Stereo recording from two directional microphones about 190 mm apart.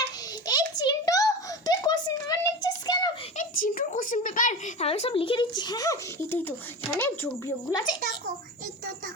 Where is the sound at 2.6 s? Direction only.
20° left (ahead or behind).